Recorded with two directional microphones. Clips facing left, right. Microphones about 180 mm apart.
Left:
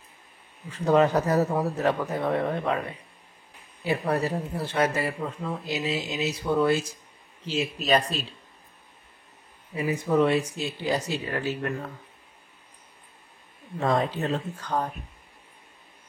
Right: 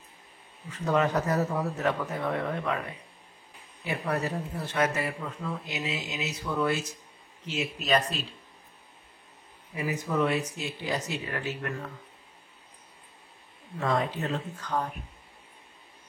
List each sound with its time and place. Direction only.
0.7 s speech: 30° left (ahead or behind)
3.8 s speech: 30° left (ahead or behind)
9.8 s speech: 30° left (ahead or behind)
13.7 s speech: 35° left (ahead or behind)